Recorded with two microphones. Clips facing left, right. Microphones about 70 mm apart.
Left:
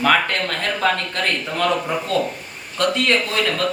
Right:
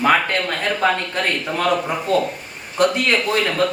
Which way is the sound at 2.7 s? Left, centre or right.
Centre.